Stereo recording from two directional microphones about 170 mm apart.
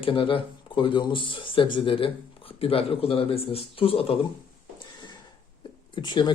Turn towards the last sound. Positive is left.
turn(degrees=25)  # may be behind; listen again after turning